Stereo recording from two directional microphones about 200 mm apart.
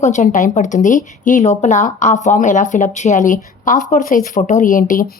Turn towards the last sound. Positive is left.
turn(degrees=45)  # may be behind; listen again after turning